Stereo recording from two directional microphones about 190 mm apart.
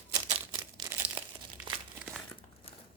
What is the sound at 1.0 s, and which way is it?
Crumpling, 10° right (ahead or behind).